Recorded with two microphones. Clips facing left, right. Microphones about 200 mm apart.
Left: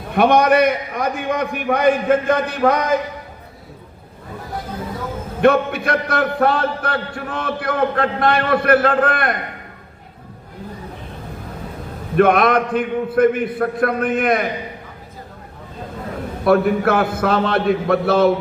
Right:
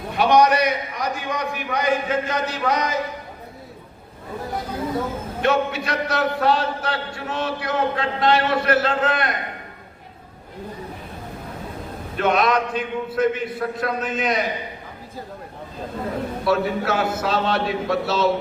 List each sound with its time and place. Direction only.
0.1 s a man's voice: 55° left (ahead or behind)
5.4 s a man's voice: 55° left (ahead or behind)
12.1 s a man's voice: 55° left (ahead or behind)
16.4 s a man's voice: 55° left (ahead or behind)